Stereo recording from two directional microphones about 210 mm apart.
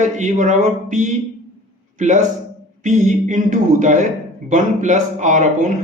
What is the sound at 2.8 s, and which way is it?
A man's voice, 35° right (ahead or behind).